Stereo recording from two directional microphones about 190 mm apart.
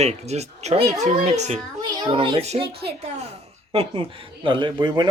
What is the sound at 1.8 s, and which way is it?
Speech, 25° right (ahead or behind).